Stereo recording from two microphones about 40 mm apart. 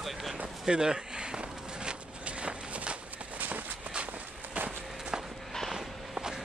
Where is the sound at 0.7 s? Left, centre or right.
Right.